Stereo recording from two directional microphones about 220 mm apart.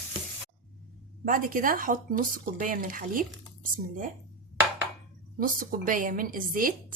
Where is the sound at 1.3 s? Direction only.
40° right (ahead or behind).